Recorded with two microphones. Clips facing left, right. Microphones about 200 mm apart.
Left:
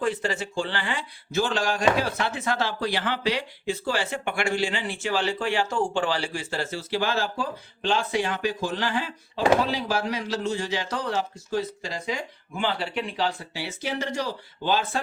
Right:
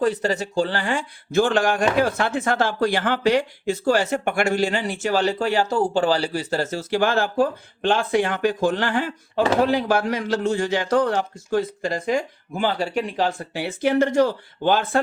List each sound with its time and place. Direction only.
0.0 s speech: 40° right (ahead or behind)